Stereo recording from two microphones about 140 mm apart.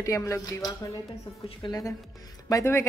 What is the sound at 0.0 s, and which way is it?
A woman's voice, 20° left (ahead or behind).